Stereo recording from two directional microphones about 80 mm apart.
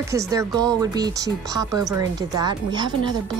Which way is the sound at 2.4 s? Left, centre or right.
Right.